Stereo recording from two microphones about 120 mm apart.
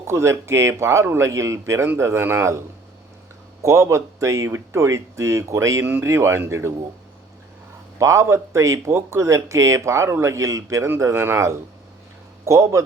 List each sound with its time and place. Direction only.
0.0 s speech: 20° right (ahead or behind)
3.6 s speech: 25° right (ahead or behind)
7.9 s speech: 25° right (ahead or behind)